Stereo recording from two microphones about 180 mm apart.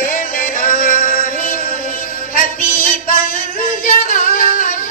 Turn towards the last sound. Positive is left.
turn(degrees=45)  # may be behind; listen again after turning